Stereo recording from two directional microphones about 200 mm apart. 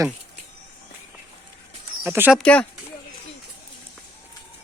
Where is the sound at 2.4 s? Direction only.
5° left (ahead or behind).